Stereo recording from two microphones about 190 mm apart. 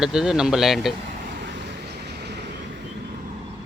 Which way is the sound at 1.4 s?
65° right (ahead or behind).